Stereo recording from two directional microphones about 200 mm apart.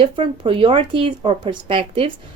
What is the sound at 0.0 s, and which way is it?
Speech, 25° right (ahead or behind).